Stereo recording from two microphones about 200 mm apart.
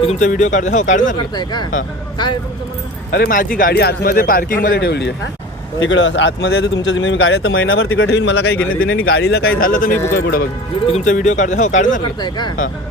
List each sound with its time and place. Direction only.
0.0 s speech: 35° left (ahead or behind)
2.1 s speech: 20° left (ahead or behind)
3.1 s speech: 50° left (ahead or behind)
5.8 s speech: 70° left (ahead or behind)
6.8 s speech: 70° left (ahead or behind); by 9.5 s 55° left (ahead or behind)
9.6 s speech: 45° left (ahead or behind)
9.9 s speech: 10° left (ahead or behind)
10.8 s speech: 35° left (ahead or behind)
12.2 s speech: 20° left (ahead or behind)